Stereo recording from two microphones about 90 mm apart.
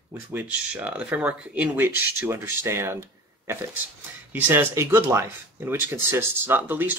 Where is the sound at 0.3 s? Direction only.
20° right (ahead or behind).